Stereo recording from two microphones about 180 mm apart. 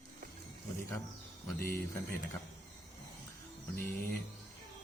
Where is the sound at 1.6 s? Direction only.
60° left (ahead or behind).